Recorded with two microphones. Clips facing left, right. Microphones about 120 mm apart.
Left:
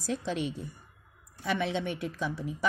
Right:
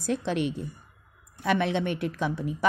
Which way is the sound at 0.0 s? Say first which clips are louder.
Right 5 dB; 60° right (ahead or behind).